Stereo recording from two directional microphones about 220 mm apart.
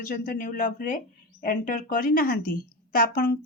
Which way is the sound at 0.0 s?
40° left (ahead or behind).